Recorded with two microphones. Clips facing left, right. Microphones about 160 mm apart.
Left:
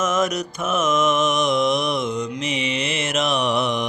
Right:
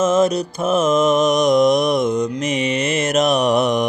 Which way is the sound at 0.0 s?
30° right (ahead or behind).